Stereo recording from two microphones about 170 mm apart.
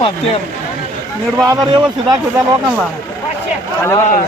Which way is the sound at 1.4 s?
25° right (ahead or behind).